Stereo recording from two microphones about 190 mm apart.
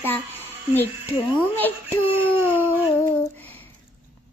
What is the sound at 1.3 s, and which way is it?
Child singing, 10° left (ahead or behind).